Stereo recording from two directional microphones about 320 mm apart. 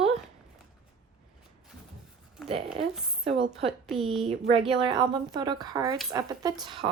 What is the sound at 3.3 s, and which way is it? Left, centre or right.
Speech, centre.